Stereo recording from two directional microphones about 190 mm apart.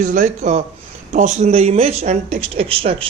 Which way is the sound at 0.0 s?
45° right (ahead or behind).